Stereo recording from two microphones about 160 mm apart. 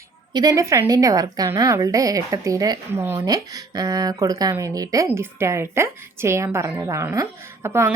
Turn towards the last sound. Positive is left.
turn(degrees=-15)  # may be behind; listen again after turning